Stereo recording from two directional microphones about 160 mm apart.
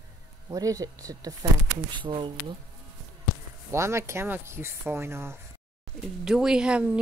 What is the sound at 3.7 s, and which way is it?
Speech, 15° right (ahead or behind).